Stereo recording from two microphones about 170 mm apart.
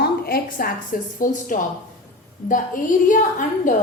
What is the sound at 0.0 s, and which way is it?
A woman's voice, 65° left (ahead or behind).